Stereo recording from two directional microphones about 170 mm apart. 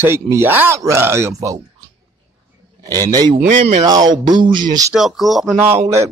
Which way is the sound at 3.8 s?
25° right (ahead or behind).